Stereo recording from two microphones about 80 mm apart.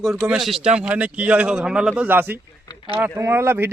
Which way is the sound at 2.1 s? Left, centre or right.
Right.